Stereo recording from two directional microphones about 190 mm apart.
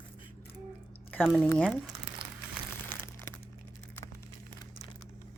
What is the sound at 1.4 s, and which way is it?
Speech, 5° left (ahead or behind).